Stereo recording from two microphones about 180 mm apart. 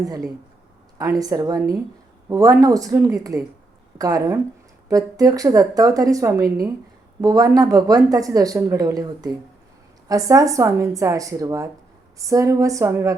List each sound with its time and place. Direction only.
0.0 s a woman's voice: 20° right (ahead or behind)